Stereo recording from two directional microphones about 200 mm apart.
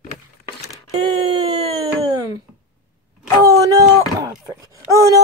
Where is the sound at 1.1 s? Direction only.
25° right (ahead or behind).